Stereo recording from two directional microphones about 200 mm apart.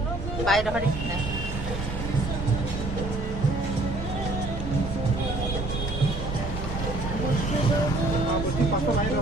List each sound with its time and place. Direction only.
0.4 s speech: centre (ahead or behind)